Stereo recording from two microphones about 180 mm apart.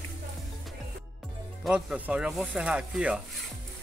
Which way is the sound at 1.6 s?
5° right (ahead or behind).